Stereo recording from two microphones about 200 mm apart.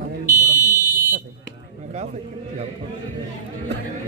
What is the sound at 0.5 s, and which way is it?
Fire alarm, 20° left (ahead or behind).